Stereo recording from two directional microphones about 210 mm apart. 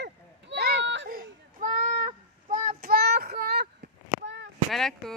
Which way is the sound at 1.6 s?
35° right (ahead or behind).